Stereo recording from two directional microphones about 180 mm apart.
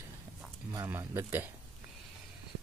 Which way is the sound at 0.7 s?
15° right (ahead or behind).